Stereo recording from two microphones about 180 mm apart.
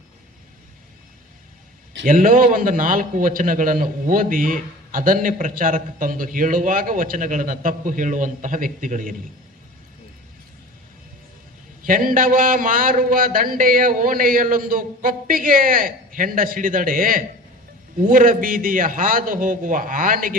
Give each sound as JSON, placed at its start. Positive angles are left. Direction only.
{"t": 2.0, "sound": "a man's voice", "side_deg": -50}
{"t": 11.8, "sound": "a man's voice", "side_deg": -50}